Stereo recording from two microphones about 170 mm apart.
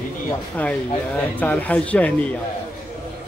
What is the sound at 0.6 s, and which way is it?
Speech, 10° left (ahead or behind).